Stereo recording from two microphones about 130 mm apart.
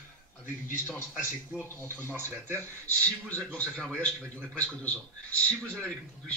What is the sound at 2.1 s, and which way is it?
Speech, 15° right (ahead or behind).